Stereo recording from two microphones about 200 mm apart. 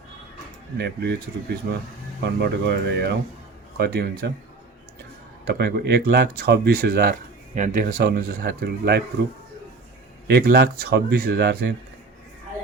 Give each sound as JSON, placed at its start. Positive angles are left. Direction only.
{"t": 0.8, "sound": "speech", "side_deg": -55}
{"t": 5.5, "sound": "speech", "side_deg": -55}
{"t": 7.9, "sound": "speech", "side_deg": -50}
{"t": 10.2, "sound": "speech", "side_deg": -55}